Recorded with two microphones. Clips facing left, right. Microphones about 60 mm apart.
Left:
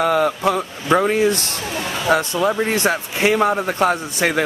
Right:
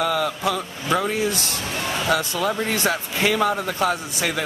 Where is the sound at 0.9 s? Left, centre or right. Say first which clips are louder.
Left 6 dB; left.